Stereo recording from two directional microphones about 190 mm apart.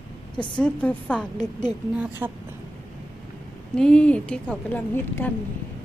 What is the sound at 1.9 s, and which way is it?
Speech, 5° right (ahead or behind).